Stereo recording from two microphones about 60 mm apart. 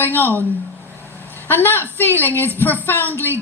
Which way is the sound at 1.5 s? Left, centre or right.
Left.